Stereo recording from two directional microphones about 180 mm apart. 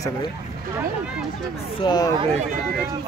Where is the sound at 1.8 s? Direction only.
20° left (ahead or behind).